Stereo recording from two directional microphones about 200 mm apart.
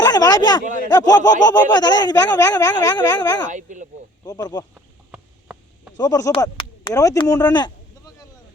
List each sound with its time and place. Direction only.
0.0 s speech: 20° left (ahead or behind)
3.5 s speech: 40° right (ahead or behind)
4.3 s speech: 20° left (ahead or behind)
4.7 s a sound: 5° right (ahead or behind)
6.0 s speech: 20° left (ahead or behind)